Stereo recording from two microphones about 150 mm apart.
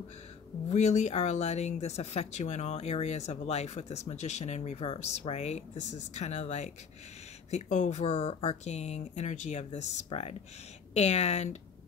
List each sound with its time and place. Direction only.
0.7 s speech: 50° left (ahead or behind)